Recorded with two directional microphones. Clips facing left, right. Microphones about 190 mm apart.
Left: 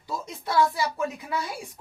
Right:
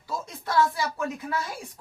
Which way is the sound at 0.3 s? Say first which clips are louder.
Left 1 dB; 15° left (ahead or behind).